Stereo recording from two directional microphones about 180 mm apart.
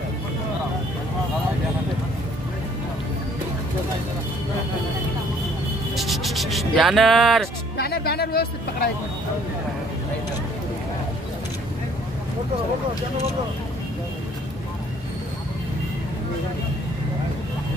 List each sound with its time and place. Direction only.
5.9 s music: centre (ahead or behind)
7.7 s speech: 60° left (ahead or behind)